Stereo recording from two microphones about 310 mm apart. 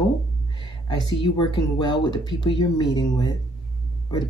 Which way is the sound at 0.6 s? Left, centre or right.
Centre.